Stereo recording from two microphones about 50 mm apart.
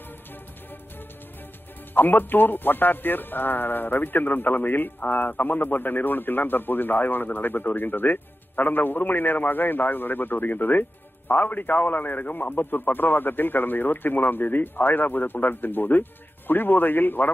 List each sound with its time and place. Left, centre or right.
2.0 s a man's voice: left